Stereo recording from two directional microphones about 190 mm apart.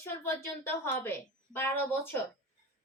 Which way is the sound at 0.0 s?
15° left (ahead or behind).